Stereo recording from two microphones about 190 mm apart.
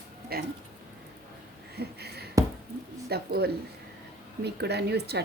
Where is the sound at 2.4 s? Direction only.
15° right (ahead or behind).